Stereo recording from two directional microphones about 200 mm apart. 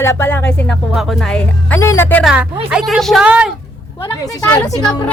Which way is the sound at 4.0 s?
20° left (ahead or behind).